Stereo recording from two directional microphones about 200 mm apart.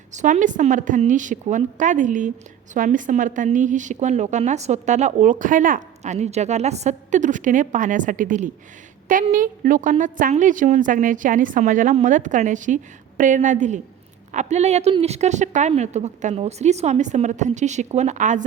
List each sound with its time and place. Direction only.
0.1 s a woman's voice: 35° right (ahead or behind)